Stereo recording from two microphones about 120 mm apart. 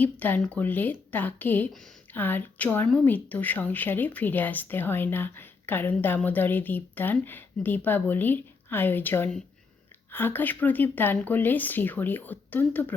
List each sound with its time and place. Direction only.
0.0 s speech: 15° left (ahead or behind)